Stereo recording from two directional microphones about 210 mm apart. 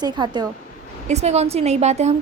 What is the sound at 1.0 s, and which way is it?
A woman's voice, 30° right (ahead or behind).